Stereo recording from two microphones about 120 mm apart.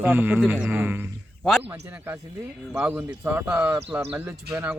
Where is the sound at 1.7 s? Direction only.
15° right (ahead or behind).